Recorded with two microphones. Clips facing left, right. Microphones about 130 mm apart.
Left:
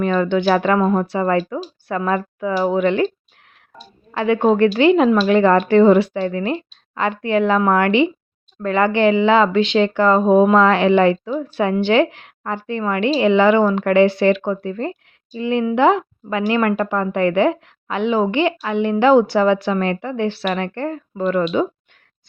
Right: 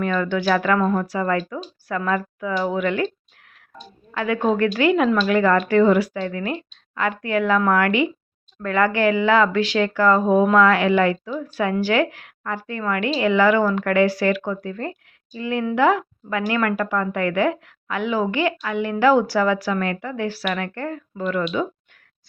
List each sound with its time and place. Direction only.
0.0 s speech: 25° left (ahead or behind)
4.1 s speech: 25° left (ahead or behind)